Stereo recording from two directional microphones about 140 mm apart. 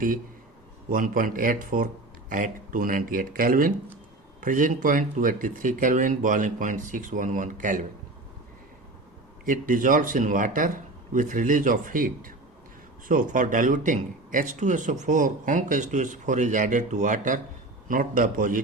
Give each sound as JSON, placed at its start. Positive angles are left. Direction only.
{"t": 0.9, "sound": "speech", "side_deg": -75}
{"t": 4.4, "sound": "speech", "side_deg": -70}
{"t": 9.4, "sound": "speech", "side_deg": -75}
{"t": 17.8, "sound": "speech", "side_deg": -80}